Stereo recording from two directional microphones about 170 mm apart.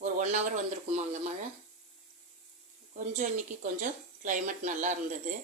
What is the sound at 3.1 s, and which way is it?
Speech, 50° right (ahead or behind).